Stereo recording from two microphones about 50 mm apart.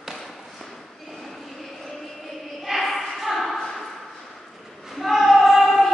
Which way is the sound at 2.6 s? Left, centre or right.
Centre.